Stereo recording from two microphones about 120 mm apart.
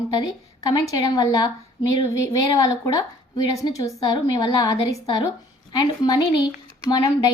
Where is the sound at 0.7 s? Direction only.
30° left (ahead or behind).